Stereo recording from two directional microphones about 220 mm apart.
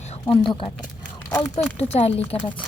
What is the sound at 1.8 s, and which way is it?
Speech, 30° left (ahead or behind).